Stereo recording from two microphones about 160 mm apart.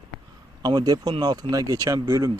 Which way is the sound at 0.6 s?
25° right (ahead or behind).